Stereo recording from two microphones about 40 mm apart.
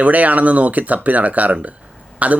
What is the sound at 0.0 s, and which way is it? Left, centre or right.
Speech, right.